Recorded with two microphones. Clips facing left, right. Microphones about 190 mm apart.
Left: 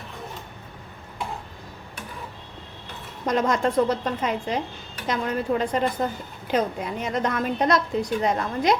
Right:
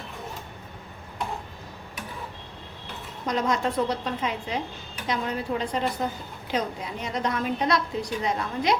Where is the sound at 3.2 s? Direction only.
50° left (ahead or behind).